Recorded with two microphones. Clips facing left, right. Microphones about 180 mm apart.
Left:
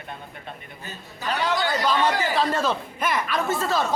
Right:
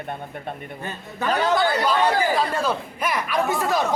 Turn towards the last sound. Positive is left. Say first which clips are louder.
# right 2 dB
turn(degrees=-15)  # may be behind; listen again after turning